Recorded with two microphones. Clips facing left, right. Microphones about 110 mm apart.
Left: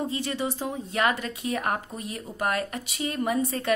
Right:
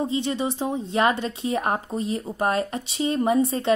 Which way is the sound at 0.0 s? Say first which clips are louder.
Right 4 dB; 20° right (ahead or behind).